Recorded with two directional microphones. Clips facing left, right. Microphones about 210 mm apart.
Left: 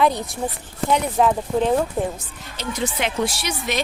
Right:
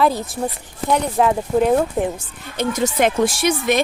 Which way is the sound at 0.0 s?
Centre (ahead or behind).